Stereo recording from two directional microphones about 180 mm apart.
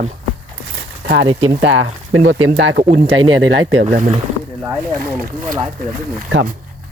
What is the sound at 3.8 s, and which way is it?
Speech, 45° right (ahead or behind).